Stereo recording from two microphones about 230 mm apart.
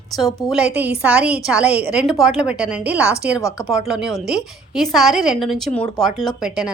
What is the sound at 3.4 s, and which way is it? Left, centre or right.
Speech, centre.